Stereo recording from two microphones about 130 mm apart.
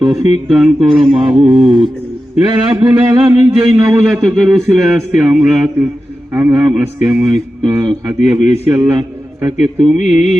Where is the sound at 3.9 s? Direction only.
Centre (ahead or behind).